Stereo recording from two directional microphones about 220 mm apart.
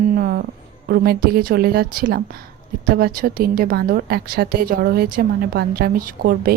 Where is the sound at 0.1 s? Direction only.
45° right (ahead or behind).